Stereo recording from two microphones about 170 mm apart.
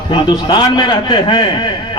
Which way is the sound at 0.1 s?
25° left (ahead or behind).